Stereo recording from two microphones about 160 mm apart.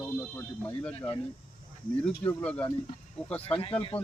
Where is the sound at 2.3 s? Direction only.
10° left (ahead or behind).